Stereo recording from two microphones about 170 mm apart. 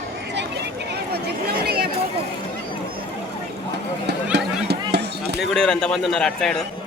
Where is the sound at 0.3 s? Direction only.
85° right; by 1.9 s 65° right (ahead or behind).